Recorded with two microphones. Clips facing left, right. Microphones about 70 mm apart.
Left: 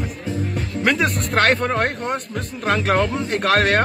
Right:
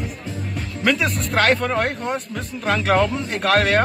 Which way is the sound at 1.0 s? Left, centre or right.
Centre.